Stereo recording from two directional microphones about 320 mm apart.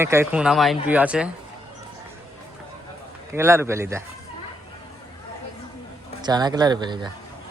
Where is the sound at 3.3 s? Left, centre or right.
Centre.